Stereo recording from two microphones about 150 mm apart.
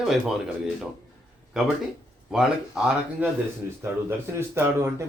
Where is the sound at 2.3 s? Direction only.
5° right (ahead or behind).